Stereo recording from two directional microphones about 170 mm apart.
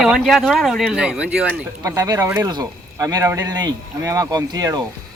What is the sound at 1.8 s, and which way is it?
Speech, 20° right (ahead or behind).